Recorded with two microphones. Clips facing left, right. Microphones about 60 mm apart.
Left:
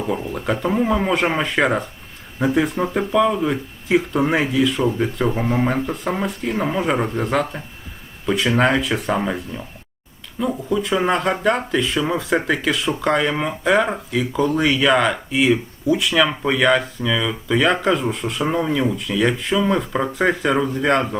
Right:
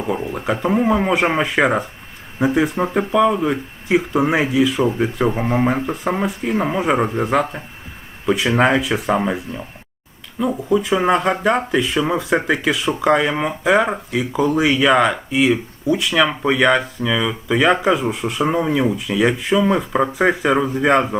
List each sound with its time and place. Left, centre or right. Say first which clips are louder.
0.2 s speech: right 2 dB; centre
0.4 s speech: right 2 dB; centre